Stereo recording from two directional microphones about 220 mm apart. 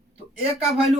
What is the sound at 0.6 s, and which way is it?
Speech, centre (ahead or behind).